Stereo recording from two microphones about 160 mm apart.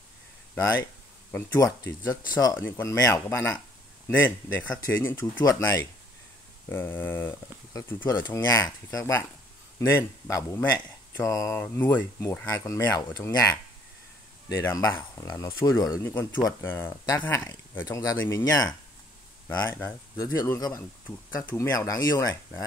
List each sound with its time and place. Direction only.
0.6 s speech: 15° left (ahead or behind)